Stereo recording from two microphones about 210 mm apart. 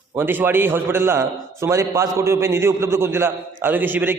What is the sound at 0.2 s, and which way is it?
A man's voice, 10° right (ahead or behind).